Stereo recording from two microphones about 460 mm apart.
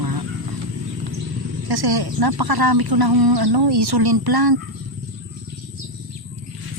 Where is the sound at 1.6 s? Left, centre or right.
Right.